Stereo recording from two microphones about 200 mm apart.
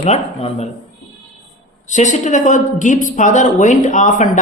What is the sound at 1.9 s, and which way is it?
A man's voice, 35° left (ahead or behind).